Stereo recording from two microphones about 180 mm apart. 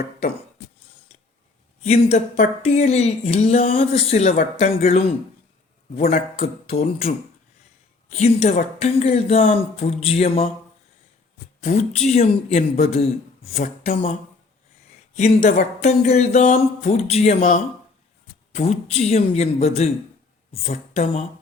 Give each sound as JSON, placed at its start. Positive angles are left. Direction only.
{"t": 1.8, "sound": "speech", "side_deg": 40}
{"t": 8.1, "sound": "speech", "side_deg": 40}
{"t": 11.6, "sound": "speech", "side_deg": 40}
{"t": 15.1, "sound": "speech", "side_deg": 40}